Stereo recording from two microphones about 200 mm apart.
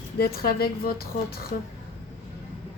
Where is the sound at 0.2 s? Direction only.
50° left (ahead or behind).